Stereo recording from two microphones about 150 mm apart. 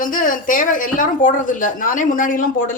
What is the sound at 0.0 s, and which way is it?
A woman's voice, 65° left (ahead or behind).